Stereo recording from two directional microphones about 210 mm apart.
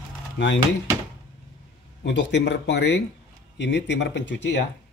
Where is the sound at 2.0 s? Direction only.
55° left (ahead or behind).